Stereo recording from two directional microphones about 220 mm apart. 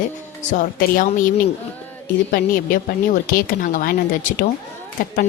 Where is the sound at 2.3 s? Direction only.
40° left (ahead or behind).